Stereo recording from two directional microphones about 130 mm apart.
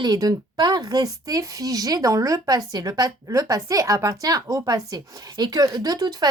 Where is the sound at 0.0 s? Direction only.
30° right (ahead or behind).